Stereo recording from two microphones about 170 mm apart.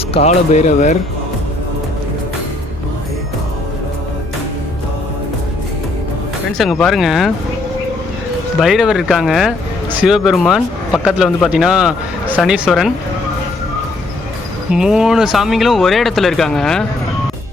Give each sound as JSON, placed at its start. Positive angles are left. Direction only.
{"t": 0.1, "sound": "speech", "side_deg": 40}
{"t": 6.6, "sound": "speech", "side_deg": 0}
{"t": 8.6, "sound": "speech", "side_deg": -5}
{"t": 14.7, "sound": "speech", "side_deg": -5}